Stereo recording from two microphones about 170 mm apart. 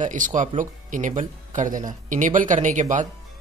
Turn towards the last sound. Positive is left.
turn(degrees=-45)  # may be behind; listen again after turning